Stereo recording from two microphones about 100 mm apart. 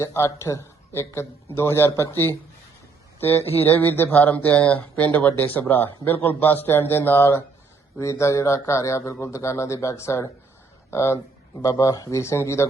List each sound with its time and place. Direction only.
0.0 s speech: 30° left (ahead or behind)